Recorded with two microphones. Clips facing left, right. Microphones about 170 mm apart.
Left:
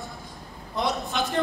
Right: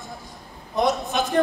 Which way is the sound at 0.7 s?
45° right (ahead or behind).